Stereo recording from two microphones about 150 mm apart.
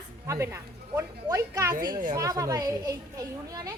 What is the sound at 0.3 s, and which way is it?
A child's voice, 20° right (ahead or behind).